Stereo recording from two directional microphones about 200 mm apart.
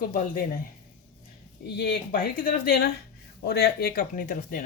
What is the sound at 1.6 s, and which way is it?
Speech, 50° left (ahead or behind).